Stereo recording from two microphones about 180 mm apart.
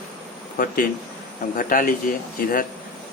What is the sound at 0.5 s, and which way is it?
A man's voice, 50° left (ahead or behind).